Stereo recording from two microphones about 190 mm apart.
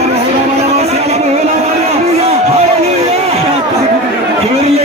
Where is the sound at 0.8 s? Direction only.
35° right (ahead or behind).